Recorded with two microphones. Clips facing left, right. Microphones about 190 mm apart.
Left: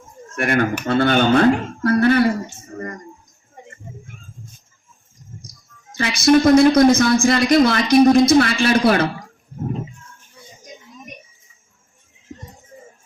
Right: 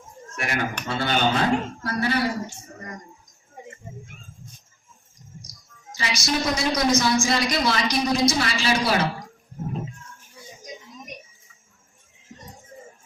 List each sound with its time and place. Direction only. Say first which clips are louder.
0.3 s speech: left 9 dB; 55° left (ahead or behind)
5.4 s speech: left 4 dB; 55° left (ahead or behind)